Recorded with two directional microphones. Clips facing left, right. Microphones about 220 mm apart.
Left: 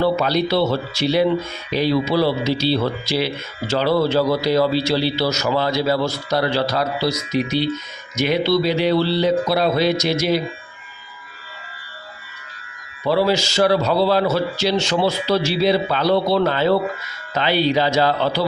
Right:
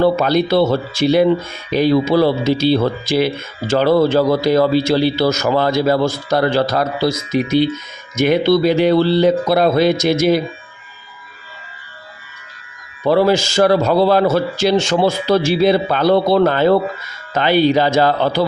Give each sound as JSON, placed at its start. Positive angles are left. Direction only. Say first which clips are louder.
{"t": 0.0, "sound": "speech", "louder": "right 4 dB", "side_deg": -50}
{"t": 13.1, "sound": "speech", "louder": "right 4 dB", "side_deg": -50}